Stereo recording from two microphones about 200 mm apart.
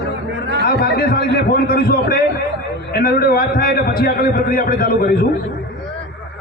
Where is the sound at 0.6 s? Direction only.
45° left (ahead or behind).